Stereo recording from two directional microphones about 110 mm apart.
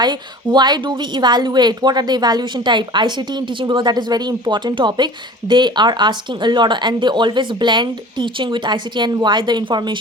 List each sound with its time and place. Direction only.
0.0 s a woman's voice: 40° right (ahead or behind)